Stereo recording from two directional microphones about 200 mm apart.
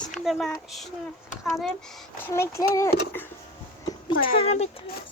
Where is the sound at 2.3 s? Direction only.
15° left (ahead or behind).